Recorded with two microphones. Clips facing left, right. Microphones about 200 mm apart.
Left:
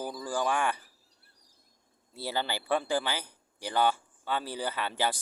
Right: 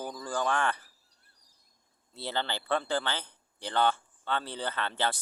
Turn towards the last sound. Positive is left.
turn(degrees=10)  # may be behind; listen again after turning